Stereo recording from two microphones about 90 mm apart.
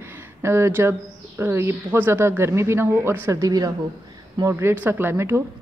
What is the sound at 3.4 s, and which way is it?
Speech, 50° right (ahead or behind).